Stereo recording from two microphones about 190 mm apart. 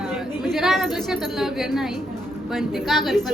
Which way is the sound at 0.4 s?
Centre (ahead or behind).